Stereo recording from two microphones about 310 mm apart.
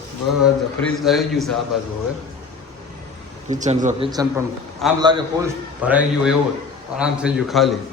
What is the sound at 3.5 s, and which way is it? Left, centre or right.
A man's voice, right.